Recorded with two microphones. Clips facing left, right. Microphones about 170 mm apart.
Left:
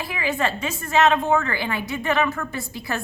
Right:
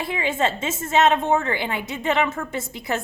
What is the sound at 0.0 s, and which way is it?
A woman's voice, 25° right (ahead or behind).